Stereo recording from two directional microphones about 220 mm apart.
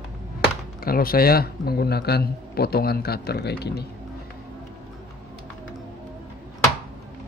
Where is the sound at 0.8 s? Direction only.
40° left (ahead or behind).